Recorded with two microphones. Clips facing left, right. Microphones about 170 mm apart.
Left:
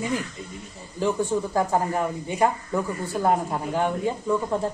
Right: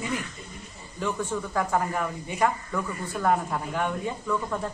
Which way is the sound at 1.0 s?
30° left (ahead or behind).